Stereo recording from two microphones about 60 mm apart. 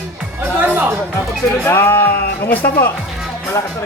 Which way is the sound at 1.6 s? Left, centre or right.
Left.